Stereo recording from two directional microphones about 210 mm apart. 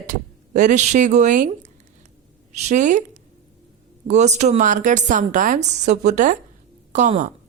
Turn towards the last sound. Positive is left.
turn(degrees=-35)  # may be behind; listen again after turning